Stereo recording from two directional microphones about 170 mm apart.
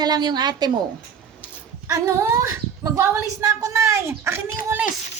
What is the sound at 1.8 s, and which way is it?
A woman's voice, 15° right (ahead or behind).